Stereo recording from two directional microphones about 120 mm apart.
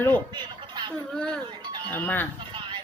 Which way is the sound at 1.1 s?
5° left (ahead or behind).